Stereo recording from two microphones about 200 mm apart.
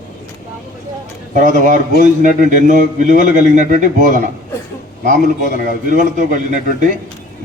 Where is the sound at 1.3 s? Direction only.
40° right (ahead or behind).